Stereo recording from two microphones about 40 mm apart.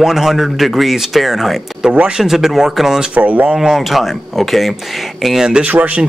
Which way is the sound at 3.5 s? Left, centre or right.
Centre.